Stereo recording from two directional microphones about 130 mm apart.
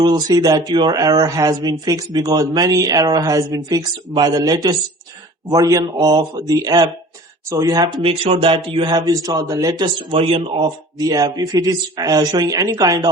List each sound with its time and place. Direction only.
0.0 s speech: 35° right (ahead or behind)
8.0 s speech: 45° right (ahead or behind); by 13.1 s 25° right (ahead or behind)